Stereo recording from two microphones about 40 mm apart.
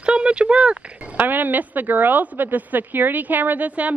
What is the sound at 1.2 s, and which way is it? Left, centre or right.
Speech, right.